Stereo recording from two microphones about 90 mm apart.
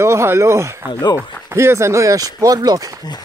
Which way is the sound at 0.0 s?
30° right (ahead or behind).